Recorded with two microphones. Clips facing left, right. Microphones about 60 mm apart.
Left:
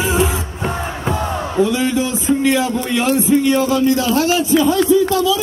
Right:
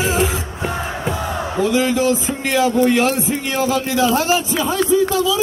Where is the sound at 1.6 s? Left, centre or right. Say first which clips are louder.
Even; right.